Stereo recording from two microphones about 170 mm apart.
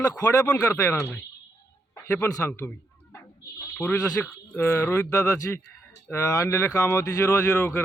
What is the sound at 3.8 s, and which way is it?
Speech, 10° left (ahead or behind).